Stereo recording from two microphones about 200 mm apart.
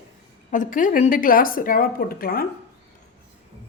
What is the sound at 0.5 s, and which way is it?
A woman's voice, 40° left (ahead or behind).